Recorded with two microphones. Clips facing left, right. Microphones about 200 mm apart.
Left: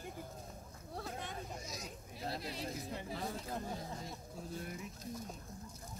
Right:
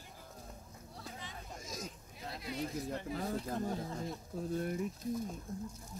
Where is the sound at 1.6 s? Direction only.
45° right (ahead or behind).